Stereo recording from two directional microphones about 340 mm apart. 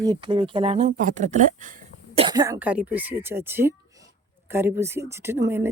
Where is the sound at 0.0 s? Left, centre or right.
Centre.